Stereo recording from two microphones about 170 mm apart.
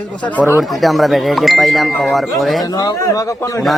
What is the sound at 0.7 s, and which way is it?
Speech, centre (ahead or behind).